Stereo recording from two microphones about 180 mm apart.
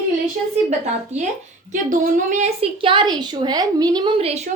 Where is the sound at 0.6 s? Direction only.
40° right (ahead or behind).